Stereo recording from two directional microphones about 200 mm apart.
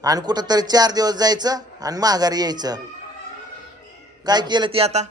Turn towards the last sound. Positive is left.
turn(degrees=-30)  # may be behind; listen again after turning